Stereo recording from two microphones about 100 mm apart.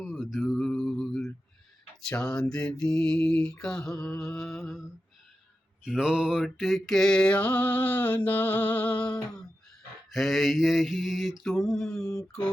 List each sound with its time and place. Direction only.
0.0 s mantra: 5° right (ahead or behind)
10.1 s mantra: centre (ahead or behind)